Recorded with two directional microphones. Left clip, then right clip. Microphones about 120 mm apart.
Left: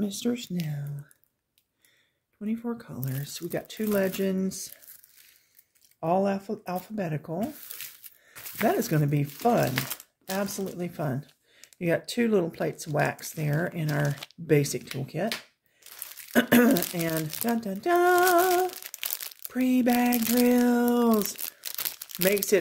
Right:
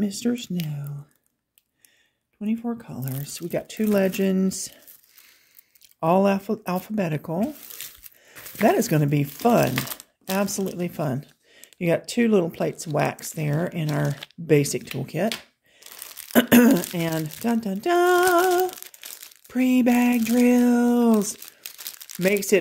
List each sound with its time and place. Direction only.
0.0 s speech: 30° right (ahead or behind)
2.4 s speech: 25° right (ahead or behind); by 4.7 s 55° right (ahead or behind)
5.9 s speech: 80° right; by 7.3 s 60° right (ahead or behind)
8.6 s speech: 50° right (ahead or behind)